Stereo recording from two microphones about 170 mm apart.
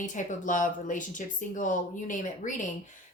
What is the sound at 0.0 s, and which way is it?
Speech, 45° left (ahead or behind).